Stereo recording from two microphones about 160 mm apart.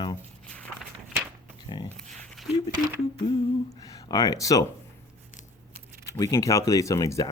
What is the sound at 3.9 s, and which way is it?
Speech, 25° left (ahead or behind).